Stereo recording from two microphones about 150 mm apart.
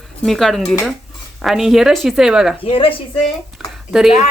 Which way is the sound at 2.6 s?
40° left (ahead or behind).